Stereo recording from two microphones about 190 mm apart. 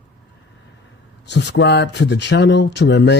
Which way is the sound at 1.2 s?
65° left (ahead or behind).